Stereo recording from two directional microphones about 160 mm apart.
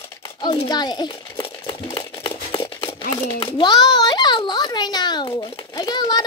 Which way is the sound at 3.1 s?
25° left (ahead or behind).